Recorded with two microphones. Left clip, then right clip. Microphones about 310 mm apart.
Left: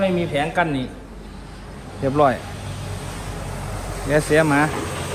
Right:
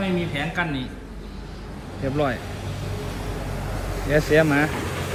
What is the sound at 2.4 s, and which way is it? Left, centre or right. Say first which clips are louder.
Vehicle: even; left.